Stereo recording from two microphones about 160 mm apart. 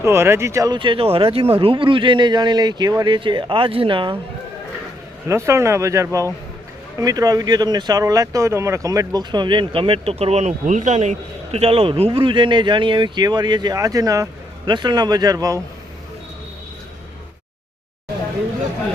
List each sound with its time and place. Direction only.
0.0 s speech: 15° right (ahead or behind); by 4.2 s 30° right (ahead or behind)
5.3 s speech: 15° right (ahead or behind)